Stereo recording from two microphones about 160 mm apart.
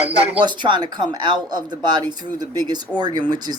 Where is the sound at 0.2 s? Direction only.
30° right (ahead or behind).